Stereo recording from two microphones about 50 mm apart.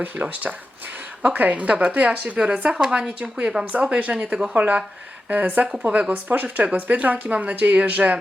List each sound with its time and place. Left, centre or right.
0.0 s a woman's voice: right